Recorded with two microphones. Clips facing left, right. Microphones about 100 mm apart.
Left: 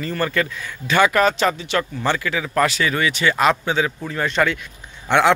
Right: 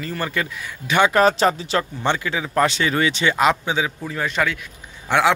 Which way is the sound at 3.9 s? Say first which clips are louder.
Left 2 dB; 5° right (ahead or behind).